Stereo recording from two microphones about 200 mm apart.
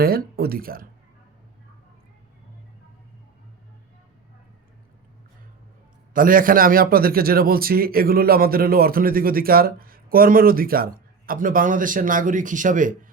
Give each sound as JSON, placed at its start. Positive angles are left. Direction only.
{"t": 0.0, "sound": "a man's voice", "side_deg": -50}
{"t": 6.1, "sound": "a man's voice", "side_deg": -45}